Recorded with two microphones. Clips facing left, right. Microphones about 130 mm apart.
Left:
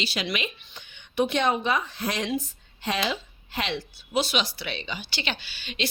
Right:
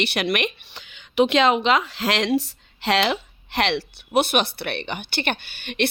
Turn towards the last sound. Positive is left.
turn(degrees=-60)  # may be behind; listen again after turning